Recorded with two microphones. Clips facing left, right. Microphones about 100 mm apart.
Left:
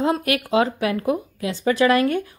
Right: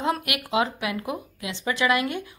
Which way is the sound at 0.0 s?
35° left (ahead or behind).